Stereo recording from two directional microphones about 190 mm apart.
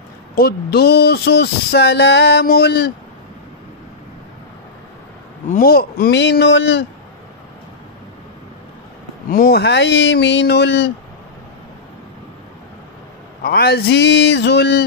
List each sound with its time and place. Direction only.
0.4 s speech: 55° left (ahead or behind)
5.5 s speech: 50° left (ahead or behind); by 6.9 s 70° left (ahead or behind)
9.3 s speech: 50° left (ahead or behind)
13.4 s speech: 55° left (ahead or behind)